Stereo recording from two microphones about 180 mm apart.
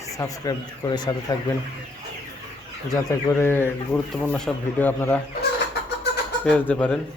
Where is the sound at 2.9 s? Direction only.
15° left (ahead or behind).